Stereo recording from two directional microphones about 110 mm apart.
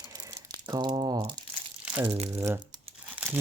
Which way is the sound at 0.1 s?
30° right (ahead or behind).